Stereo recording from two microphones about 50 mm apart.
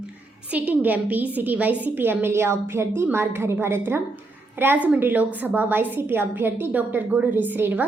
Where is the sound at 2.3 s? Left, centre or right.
Right.